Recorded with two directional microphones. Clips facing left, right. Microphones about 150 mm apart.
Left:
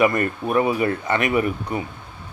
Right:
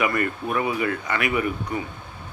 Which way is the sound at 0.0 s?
25° left (ahead or behind).